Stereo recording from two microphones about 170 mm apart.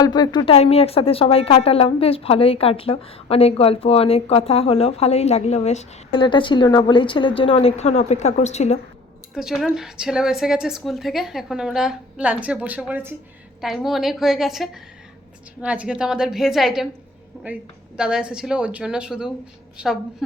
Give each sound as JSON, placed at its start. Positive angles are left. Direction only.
{"t": 0.0, "sound": "speech", "side_deg": 25}
{"t": 0.5, "sound": "a woman's voice", "side_deg": 40}
{"t": 6.2, "sound": "a woman's voice", "side_deg": 30}
{"t": 9.3, "sound": "a woman's voice", "side_deg": 0}